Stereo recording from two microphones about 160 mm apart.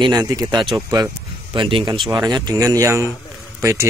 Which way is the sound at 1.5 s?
30° right (ahead or behind).